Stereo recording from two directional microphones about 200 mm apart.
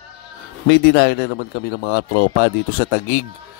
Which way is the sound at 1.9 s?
60° left (ahead or behind).